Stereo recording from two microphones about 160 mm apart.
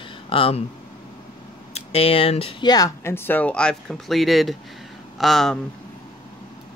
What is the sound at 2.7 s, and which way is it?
Speech, 20° left (ahead or behind).